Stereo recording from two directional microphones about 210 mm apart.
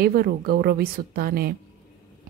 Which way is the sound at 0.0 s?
45° right (ahead or behind).